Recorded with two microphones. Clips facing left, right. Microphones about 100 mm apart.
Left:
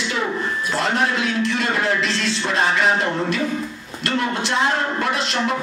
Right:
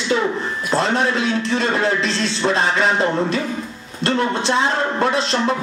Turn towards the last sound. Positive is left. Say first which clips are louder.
# right 4 dB
turn(degrees=-30)  # may be behind; listen again after turning